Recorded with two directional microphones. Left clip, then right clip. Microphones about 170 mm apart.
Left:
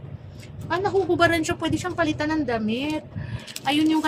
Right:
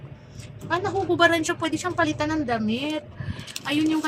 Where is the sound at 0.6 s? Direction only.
5° left (ahead or behind).